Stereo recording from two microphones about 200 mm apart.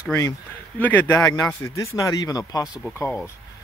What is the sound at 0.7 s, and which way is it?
Speech, 10° left (ahead or behind).